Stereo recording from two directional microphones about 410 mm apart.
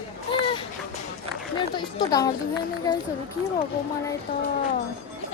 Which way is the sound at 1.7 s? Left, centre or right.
Centre.